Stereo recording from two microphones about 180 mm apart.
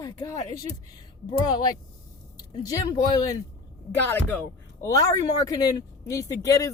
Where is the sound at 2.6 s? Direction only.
20° left (ahead or behind).